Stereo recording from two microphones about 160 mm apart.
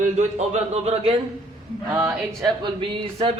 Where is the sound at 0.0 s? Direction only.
45° right (ahead or behind).